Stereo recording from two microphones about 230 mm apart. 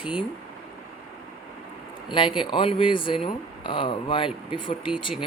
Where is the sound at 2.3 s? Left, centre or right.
Left.